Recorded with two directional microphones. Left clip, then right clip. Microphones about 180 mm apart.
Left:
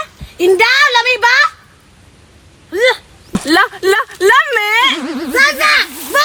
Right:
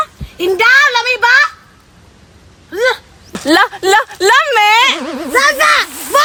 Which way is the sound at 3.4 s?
30° right (ahead or behind).